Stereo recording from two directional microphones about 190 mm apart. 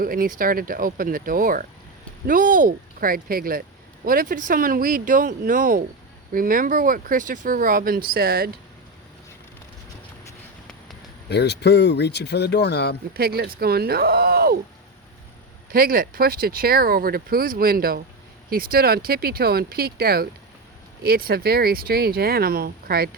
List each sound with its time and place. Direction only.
0.0 s speech: 50° right (ahead or behind)
11.3 s speech: 60° left (ahead or behind)
13.1 s speech: 55° right (ahead or behind)
15.7 s speech: 50° right (ahead or behind)